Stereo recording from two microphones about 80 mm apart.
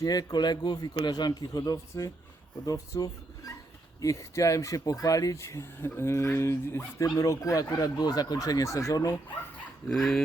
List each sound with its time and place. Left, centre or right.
0.0 s a man's voice: left
7.2 s speech: left
9.9 s speech: centre